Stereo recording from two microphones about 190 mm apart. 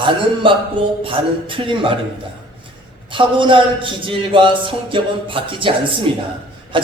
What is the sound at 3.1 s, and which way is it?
Speech, 25° right (ahead or behind).